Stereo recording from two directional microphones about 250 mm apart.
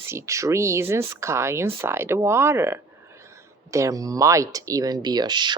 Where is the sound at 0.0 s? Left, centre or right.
Centre.